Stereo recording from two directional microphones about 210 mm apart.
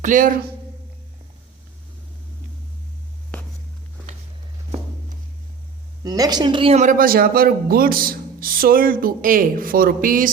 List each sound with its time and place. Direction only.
0.0 s speech: 40° right (ahead or behind)
6.0 s speech: 20° right (ahead or behind); by 10.3 s 40° right (ahead or behind)